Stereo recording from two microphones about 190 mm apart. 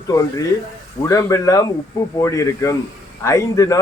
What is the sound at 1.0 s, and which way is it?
Speech, 15° left (ahead or behind).